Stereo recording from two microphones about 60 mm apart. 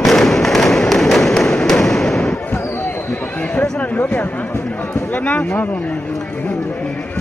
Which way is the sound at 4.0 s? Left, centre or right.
Left.